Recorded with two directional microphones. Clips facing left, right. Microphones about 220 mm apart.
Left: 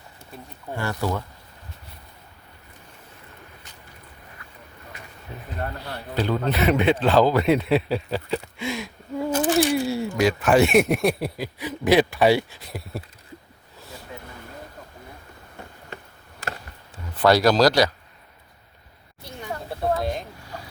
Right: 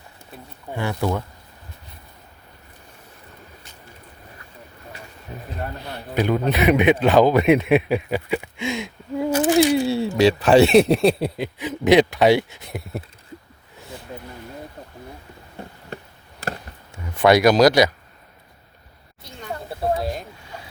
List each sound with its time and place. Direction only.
0.7 s speech: 15° right (ahead or behind)
5.8 s speech: 15° right (ahead or behind)
16.9 s speech: 15° right (ahead or behind)
19.9 s speech: 5° right (ahead or behind)